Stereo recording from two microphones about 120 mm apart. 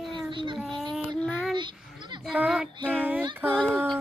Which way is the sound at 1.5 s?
40° right (ahead or behind).